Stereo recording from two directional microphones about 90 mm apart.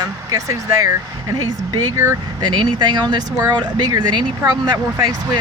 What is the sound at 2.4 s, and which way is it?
Speech, 50° right (ahead or behind).